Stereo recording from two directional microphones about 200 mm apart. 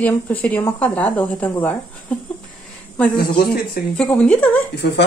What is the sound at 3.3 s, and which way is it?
Speech, 50° left (ahead or behind).